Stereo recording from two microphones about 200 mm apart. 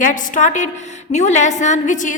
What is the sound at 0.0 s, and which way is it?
A woman's voice, 40° left (ahead or behind).